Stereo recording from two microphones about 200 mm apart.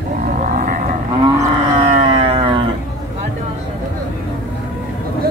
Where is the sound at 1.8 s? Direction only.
30° right (ahead or behind).